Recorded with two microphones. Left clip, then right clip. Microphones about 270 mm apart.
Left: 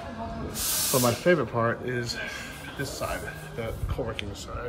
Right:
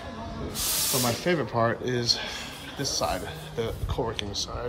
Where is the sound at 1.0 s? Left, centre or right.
Centre.